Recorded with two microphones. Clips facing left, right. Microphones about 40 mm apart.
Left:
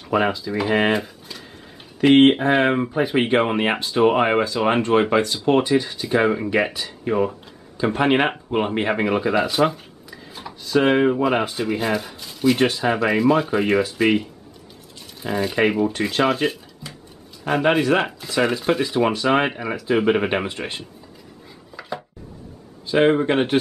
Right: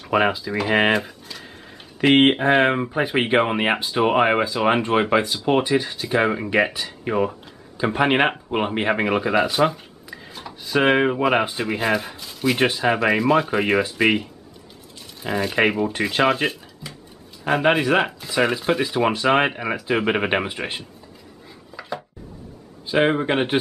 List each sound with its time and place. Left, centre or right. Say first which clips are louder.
0.1 s speech: right 1 dB; centre
0.9 s speech: right 1 dB; centre
10.6 s speech: left 1 dB; centre
21.7 s chopping: even; centre
22.8 s speech: left 2 dB; centre